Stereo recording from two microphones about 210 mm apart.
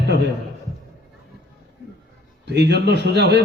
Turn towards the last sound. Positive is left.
turn(degrees=-55)  # may be behind; listen again after turning